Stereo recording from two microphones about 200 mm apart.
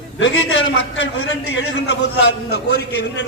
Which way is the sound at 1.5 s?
60° left (ahead or behind).